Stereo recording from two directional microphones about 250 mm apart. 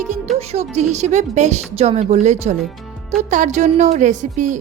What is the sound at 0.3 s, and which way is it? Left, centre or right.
A woman's voice, right.